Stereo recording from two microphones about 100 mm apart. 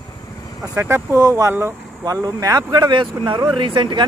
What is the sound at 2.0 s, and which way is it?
Speech, 35° right (ahead or behind).